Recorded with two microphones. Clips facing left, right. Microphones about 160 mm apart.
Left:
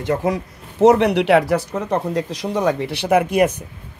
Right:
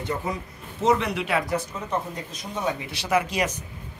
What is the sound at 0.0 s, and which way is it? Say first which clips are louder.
Speech: left 9 dB; 90° left.